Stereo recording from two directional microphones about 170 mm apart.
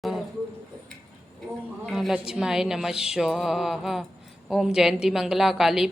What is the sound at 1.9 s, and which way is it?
A woman's voice, centre (ahead or behind).